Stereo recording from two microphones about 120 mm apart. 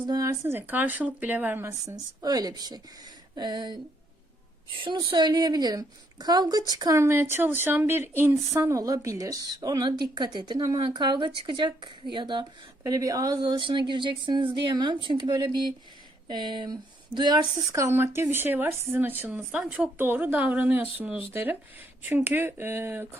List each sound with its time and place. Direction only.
0.0 s a woman's voice: 30° right (ahead or behind)
2.2 s a woman's voice: 35° right (ahead or behind)
4.8 s a woman's voice: 40° right (ahead or behind); by 23.0 s 20° right (ahead or behind)